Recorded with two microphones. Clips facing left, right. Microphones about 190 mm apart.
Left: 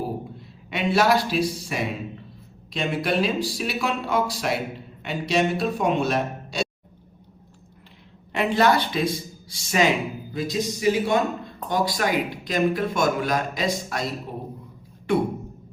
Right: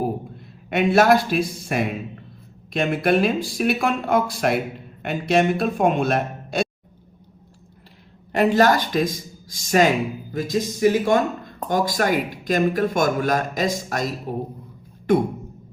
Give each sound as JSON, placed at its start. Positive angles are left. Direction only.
{"t": 0.7, "sound": "speech", "side_deg": -50}
{"t": 8.3, "sound": "speech", "side_deg": -40}